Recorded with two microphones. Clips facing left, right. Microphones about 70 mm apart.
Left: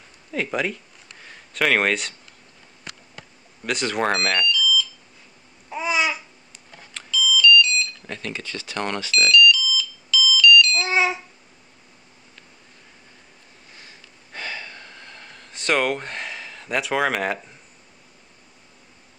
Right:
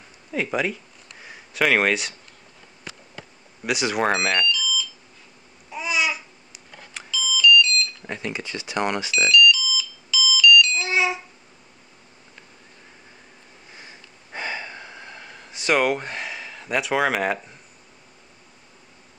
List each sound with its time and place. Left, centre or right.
0.3 s speech: centre
1.2 s a sound: centre
3.6 s speech: centre
5.7 s babbling: left
6.5 s a sound: centre
8.0 s ringtone: centre
10.9 s smoke detector: left
13.7 s gasp: right; by 17.6 s centre